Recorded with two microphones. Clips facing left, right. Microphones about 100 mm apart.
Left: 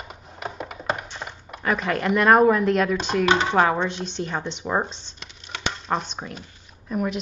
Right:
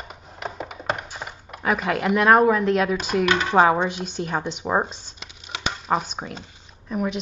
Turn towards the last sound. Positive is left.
turn(degrees=0)  # may be behind; listen again after turning